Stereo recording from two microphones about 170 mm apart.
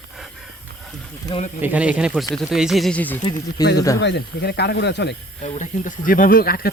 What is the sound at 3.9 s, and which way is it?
Speech, 85° left.